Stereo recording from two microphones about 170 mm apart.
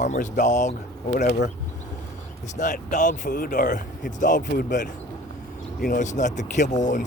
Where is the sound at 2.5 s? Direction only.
45° left (ahead or behind).